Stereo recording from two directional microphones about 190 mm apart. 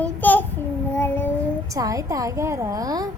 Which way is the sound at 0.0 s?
10° left (ahead or behind).